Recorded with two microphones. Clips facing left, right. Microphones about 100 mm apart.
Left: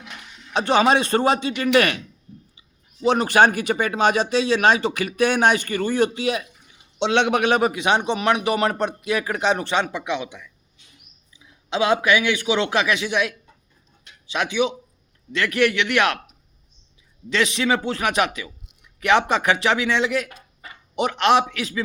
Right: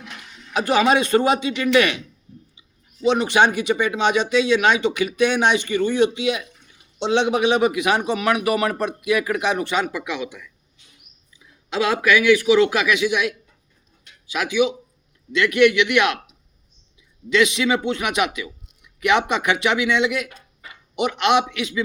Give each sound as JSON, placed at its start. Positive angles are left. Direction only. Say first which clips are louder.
{"t": 0.5, "sound": "speech", "louder": "even", "side_deg": 30}
{"t": 1.7, "sound": "speech", "louder": "even", "side_deg": 45}
{"t": 7.0, "sound": "a man's voice", "louder": "even", "side_deg": 65}
{"t": 7.6, "sound": "speech", "louder": "right 1 dB", "side_deg": 30}
{"t": 11.7, "sound": "a man's voice", "louder": "even", "side_deg": 20}
{"t": 14.0, "sound": "a sound", "louder": "left 1 dB", "side_deg": 30}
{"t": 15.3, "sound": "speech", "louder": "right 4 dB", "side_deg": 35}
{"t": 17.2, "sound": "a man's voice", "louder": "right 2 dB", "side_deg": 35}